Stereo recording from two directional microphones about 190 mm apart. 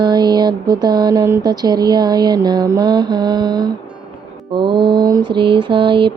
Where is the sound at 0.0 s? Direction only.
20° right (ahead or behind).